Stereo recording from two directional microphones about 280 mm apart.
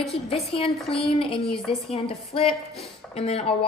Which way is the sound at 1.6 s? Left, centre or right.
Centre.